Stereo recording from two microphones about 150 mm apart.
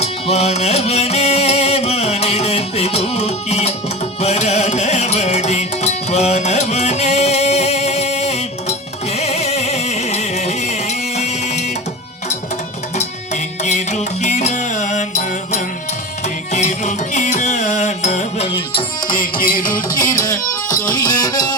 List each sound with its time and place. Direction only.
0.0 s music: 45° left (ahead or behind)
13.0 s music: 50° left (ahead or behind)
18.4 s music: 35° left (ahead or behind)
19.0 s music: 70° left (ahead or behind)
20.0 s music: 25° left (ahead or behind)